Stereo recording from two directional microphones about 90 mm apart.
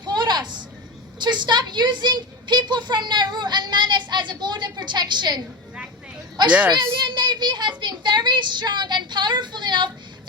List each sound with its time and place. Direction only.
0.0 s a sound: 55° right (ahead or behind)
1.2 s a woman's voice: 55° right (ahead or behind)
6.7 s a child's voice: 55° right (ahead or behind)